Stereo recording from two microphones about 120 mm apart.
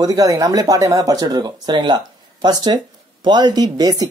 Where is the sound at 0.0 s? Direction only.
30° right (ahead or behind).